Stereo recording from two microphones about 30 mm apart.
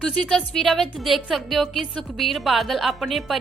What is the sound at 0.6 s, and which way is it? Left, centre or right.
Speech, centre.